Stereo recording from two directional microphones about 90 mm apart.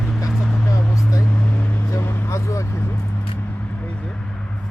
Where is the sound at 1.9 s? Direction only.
30° left (ahead or behind).